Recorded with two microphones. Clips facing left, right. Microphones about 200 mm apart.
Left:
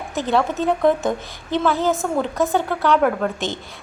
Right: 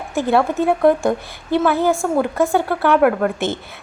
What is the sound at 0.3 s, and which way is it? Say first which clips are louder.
A woman's voice: right 3 dB; 15° right (ahead or behind).